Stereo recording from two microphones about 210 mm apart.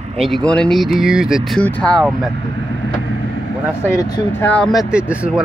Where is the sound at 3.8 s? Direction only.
15° left (ahead or behind); by 5.4 s 5° right (ahead or behind).